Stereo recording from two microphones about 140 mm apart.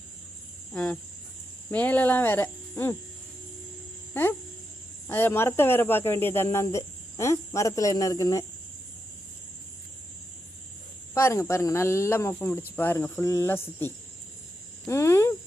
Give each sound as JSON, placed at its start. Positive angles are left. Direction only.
{"t": 0.7, "sound": "cricket", "side_deg": 10}
{"t": 1.7, "sound": "speech", "side_deg": 10}
{"t": 4.1, "sound": "speech", "side_deg": 15}
{"t": 11.1, "sound": "speech", "side_deg": 20}